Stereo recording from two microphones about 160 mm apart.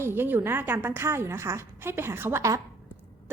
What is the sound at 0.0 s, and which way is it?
A woman's voice, 15° right (ahead or behind).